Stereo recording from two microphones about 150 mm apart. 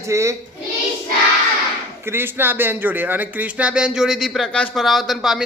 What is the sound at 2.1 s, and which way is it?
Speech, 15° right (ahead or behind).